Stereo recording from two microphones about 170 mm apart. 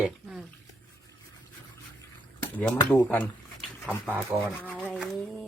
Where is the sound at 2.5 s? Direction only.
10° left (ahead or behind).